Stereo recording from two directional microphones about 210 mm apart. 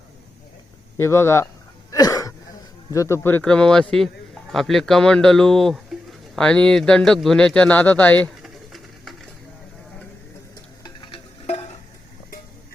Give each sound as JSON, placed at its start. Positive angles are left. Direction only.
{"t": 0.9, "sound": "speech", "side_deg": 10}
{"t": 1.9, "sound": "throat clearing", "side_deg": 15}
{"t": 2.9, "sound": "a man's voice", "side_deg": 15}
{"t": 10.8, "sound": "music", "side_deg": 25}